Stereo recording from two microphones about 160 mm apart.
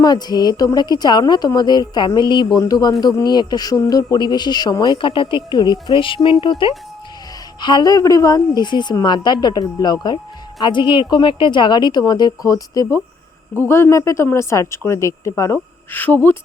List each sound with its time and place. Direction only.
0.0 s a woman's voice: 25° left (ahead or behind)